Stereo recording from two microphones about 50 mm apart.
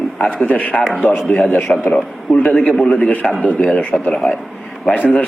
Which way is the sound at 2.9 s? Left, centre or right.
Left.